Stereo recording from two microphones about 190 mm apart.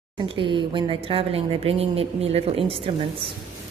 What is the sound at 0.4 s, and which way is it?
Speech, 25° right (ahead or behind).